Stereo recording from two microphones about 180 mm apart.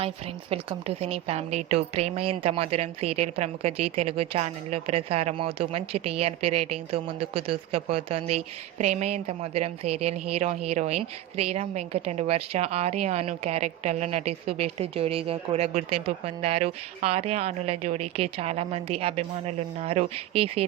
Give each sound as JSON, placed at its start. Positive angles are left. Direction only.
{"t": 0.5, "sound": "a woman's voice", "side_deg": -35}